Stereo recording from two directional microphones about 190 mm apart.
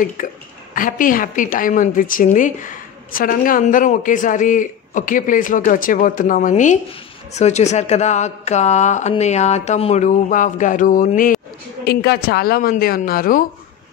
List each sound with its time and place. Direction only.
0.2 s a woman's voice: 45° left (ahead or behind)
11.8 s a woman's voice: 60° left (ahead or behind)